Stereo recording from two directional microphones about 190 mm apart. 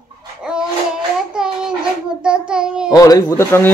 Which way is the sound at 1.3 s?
5° right (ahead or behind).